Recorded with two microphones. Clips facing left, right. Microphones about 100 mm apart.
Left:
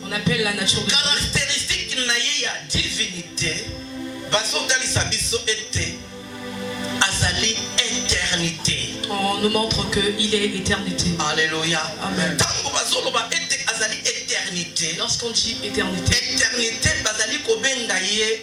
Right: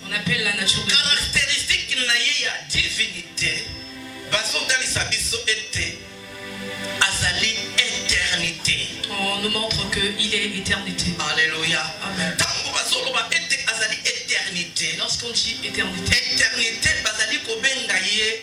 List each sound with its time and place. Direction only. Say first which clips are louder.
0.1 s music: left 4 dB; 25° left (ahead or behind)
7.0 s music: even; 20° left (ahead or behind)
12.4 s speech: left 3 dB; 20° left (ahead or behind)